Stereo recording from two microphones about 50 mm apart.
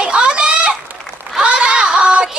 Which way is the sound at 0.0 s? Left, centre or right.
Right.